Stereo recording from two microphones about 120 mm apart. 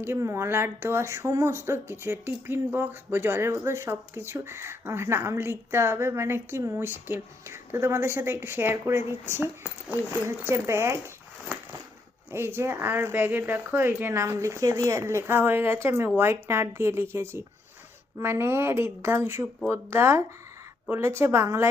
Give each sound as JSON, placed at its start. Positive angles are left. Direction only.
{"t": 0.0, "sound": "speech", "side_deg": -20}
{"t": 12.3, "sound": "speech", "side_deg": -20}